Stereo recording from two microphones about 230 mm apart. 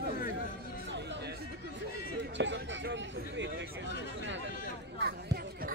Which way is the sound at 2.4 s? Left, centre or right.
Right.